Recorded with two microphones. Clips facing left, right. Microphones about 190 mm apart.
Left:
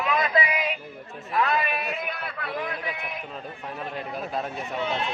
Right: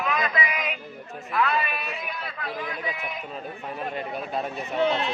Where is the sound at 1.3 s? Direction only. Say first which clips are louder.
Left 1 dB; 40° left (ahead or behind).